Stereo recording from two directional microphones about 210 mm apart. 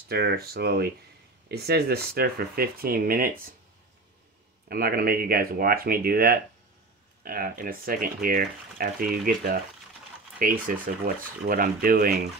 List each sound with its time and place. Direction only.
0.1 s speech: 50° right (ahead or behind)
4.6 s speech: 45° right (ahead or behind)